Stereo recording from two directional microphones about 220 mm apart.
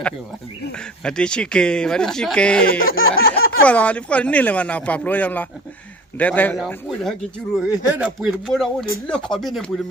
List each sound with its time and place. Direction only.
0.7 s speech: 5° left (ahead or behind)
2.6 s speech: 40° left (ahead or behind)
3.6 s speech: 5° left (ahead or behind)